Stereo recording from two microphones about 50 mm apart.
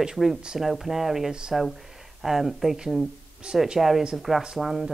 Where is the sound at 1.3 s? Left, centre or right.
Centre.